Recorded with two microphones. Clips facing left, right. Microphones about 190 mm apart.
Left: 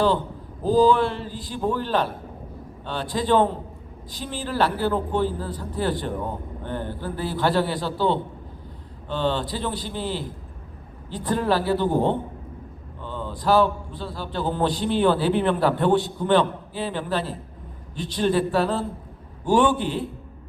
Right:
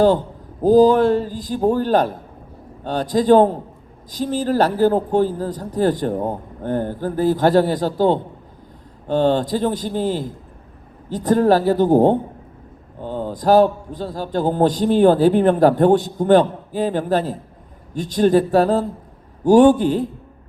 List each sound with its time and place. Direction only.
0.6 s a man's voice: 45° right (ahead or behind)